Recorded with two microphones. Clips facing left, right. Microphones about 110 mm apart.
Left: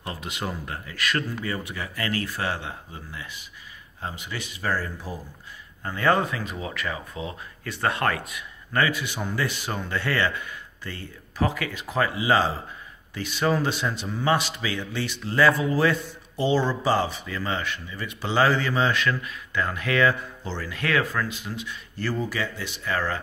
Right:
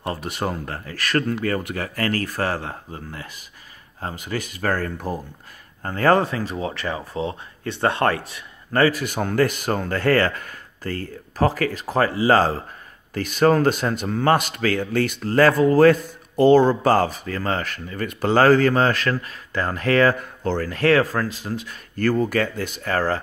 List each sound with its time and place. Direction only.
0.0 s a man's voice: 45° right (ahead or behind)
5.8 s a man's voice: 45° right (ahead or behind)